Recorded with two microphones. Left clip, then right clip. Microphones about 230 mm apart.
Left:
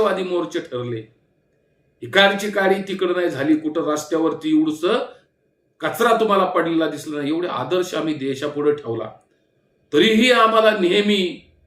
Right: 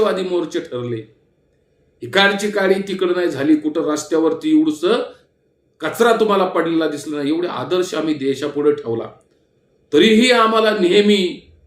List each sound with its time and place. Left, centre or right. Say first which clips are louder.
0.0 s speech: right 2 dB; centre